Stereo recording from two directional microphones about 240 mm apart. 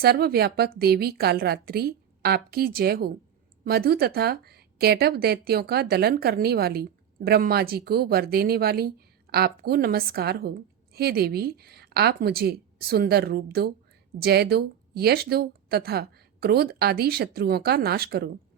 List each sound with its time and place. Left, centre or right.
0.0 s a woman's voice: right